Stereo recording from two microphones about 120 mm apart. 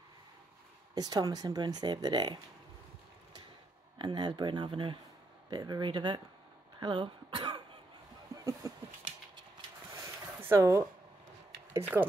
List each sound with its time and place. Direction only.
0.9 s speech: 35° right (ahead or behind)
4.0 s speech: 40° right (ahead or behind)
9.9 s a sound: 25° right (ahead or behind)
11.7 s speech: 15° right (ahead or behind)